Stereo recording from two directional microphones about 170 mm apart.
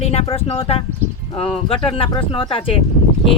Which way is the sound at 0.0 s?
35° left (ahead or behind).